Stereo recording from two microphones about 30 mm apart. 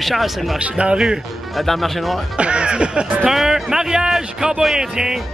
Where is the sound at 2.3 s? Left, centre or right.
Right.